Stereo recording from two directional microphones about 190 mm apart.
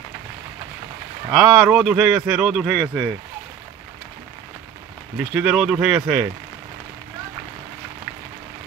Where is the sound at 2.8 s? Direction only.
25° right (ahead or behind).